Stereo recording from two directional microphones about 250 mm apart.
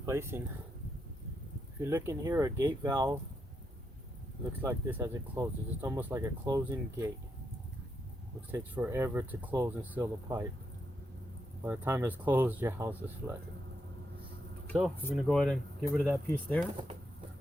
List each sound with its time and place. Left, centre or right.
0.0 s speech: centre
1.8 s speech: centre
4.6 s speech: centre
8.5 s speech: centre
11.6 s speech: centre
15.0 s speech: centre